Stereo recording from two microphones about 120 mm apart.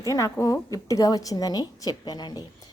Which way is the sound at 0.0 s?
30° left (ahead or behind).